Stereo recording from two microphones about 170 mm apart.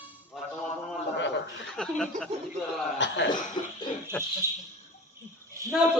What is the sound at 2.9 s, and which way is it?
Cough, 90° left.